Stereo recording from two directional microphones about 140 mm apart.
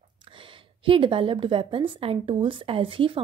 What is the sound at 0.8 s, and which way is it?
A woman's voice, 40° right (ahead or behind).